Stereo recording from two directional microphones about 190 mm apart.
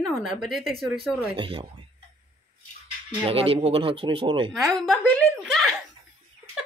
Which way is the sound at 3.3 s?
30° right (ahead or behind).